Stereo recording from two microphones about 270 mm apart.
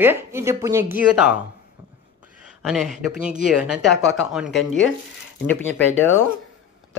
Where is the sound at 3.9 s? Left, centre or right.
Left.